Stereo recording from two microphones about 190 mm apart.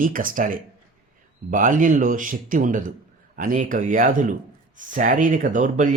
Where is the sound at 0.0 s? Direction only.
45° right (ahead or behind).